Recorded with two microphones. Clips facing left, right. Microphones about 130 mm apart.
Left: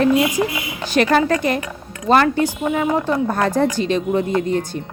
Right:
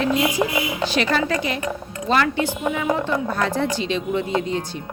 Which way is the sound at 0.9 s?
50° left (ahead or behind).